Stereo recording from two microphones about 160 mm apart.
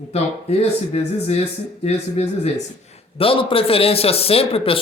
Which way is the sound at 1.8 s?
40° left (ahead or behind).